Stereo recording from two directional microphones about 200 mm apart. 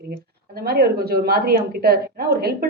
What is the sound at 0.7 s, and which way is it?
Speech, 50° right (ahead or behind).